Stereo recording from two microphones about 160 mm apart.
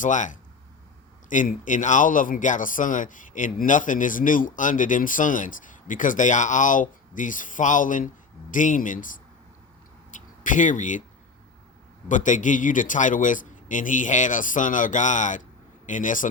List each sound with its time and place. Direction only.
0.0 s a man's voice: 50° left (ahead or behind)
10.1 s a sound: 55° left (ahead or behind)
12.0 s a man's voice: 50° left (ahead or behind)